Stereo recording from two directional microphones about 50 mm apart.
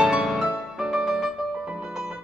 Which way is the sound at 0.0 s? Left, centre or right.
Centre.